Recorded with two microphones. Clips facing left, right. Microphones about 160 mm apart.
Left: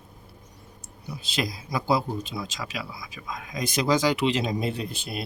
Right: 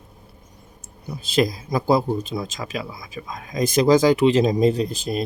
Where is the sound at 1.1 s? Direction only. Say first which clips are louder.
Right 9 dB; 45° right (ahead or behind).